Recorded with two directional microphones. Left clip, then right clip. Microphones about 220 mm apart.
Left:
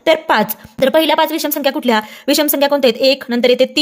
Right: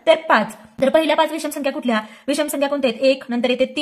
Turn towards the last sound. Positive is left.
turn(degrees=45)  # may be behind; listen again after turning